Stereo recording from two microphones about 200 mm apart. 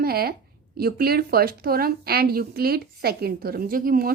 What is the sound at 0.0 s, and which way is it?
Speech, 50° right (ahead or behind).